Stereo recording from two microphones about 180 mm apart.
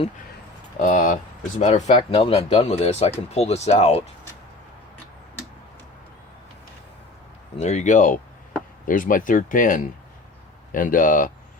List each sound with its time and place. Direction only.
0.8 s speech: 45° left (ahead or behind)
7.6 s speech: 40° left (ahead or behind)